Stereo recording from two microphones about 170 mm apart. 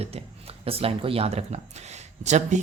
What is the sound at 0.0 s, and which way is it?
Speech, 35° right (ahead or behind).